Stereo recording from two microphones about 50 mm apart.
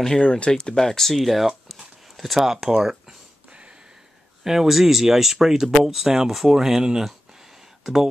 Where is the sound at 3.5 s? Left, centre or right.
Centre.